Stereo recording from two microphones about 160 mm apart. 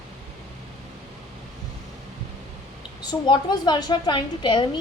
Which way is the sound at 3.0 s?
25° left (ahead or behind).